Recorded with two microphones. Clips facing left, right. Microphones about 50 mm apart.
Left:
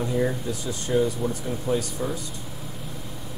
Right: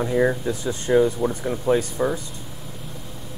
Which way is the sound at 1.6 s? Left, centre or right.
Right.